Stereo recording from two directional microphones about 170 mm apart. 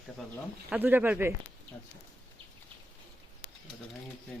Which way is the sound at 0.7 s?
10° right (ahead or behind).